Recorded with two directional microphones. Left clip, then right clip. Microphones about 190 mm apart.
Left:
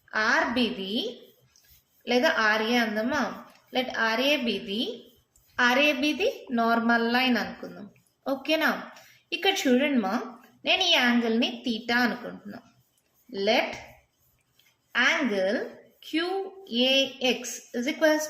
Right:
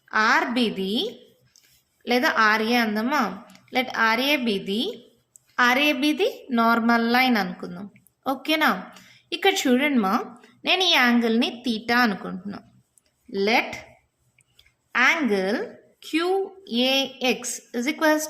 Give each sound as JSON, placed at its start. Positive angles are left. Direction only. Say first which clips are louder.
{"t": 0.1, "sound": "a woman's voice", "louder": "right 4 dB", "side_deg": -40}
{"t": 14.9, "sound": "speech", "louder": "right 4 dB", "side_deg": -40}